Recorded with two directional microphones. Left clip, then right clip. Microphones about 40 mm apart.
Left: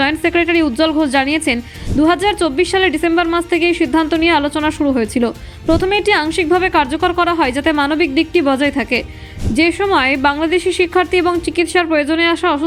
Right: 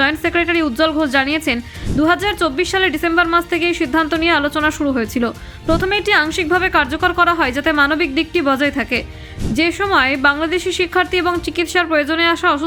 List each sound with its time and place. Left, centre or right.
0.0 s a woman's voice: left